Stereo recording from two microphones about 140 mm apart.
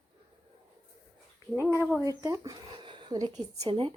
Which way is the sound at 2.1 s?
25° right (ahead or behind).